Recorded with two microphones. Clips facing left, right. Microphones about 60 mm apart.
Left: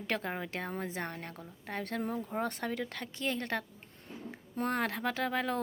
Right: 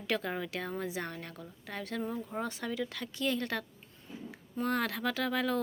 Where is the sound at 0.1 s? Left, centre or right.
Left.